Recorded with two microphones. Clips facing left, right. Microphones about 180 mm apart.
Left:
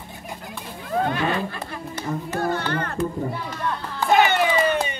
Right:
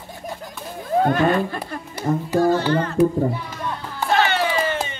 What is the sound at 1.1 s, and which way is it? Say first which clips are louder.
Speech: right 6 dB; 45° right (ahead or behind).